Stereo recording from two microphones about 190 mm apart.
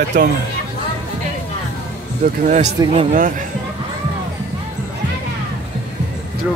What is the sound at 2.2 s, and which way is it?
Speech, 40° right (ahead or behind).